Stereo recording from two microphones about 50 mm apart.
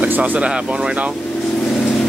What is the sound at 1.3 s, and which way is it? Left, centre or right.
Vehicle, centre.